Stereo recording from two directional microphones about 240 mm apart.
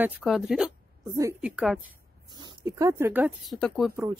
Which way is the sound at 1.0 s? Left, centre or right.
Centre.